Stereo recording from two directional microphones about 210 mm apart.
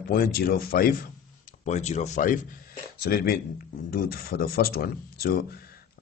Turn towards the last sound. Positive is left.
turn(degrees=45)  # may be behind; listen again after turning